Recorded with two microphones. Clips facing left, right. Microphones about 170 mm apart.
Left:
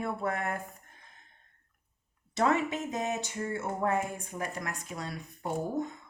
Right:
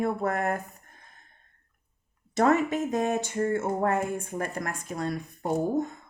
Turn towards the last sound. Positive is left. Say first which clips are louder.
# right 6 dB
turn(degrees=-45)  # may be behind; listen again after turning